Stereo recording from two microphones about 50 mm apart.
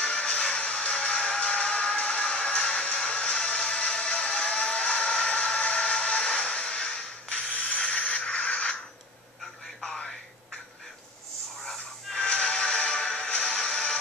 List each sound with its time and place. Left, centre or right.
0.0 s music: left
9.8 s music: centre
11.6 s a sound: centre
12.3 s music: left